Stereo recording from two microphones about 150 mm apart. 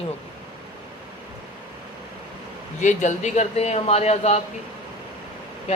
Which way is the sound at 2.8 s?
55° left (ahead or behind).